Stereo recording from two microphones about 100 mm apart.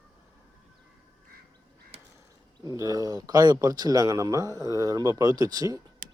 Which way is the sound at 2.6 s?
35° right (ahead or behind).